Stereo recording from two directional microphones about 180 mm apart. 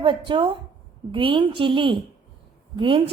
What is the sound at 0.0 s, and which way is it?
A woman's voice, 25° right (ahead or behind).